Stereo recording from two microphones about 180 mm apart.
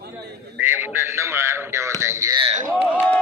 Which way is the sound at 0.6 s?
10° right (ahead or behind).